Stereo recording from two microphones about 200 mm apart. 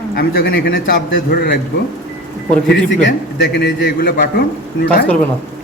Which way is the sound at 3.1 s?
60° left (ahead or behind).